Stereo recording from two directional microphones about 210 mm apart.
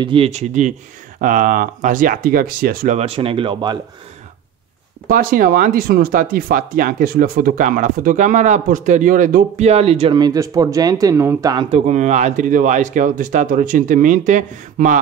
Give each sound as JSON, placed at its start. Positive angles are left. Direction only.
{"t": 0.0, "sound": "speech", "side_deg": -25}
{"t": 5.0, "sound": "speech", "side_deg": -40}
{"t": 11.7, "sound": "speech", "side_deg": -35}